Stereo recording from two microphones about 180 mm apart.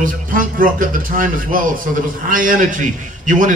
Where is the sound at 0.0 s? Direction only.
50° right (ahead or behind).